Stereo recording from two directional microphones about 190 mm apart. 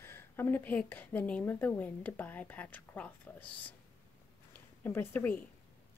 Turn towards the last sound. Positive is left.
turn(degrees=10)  # may be behind; listen again after turning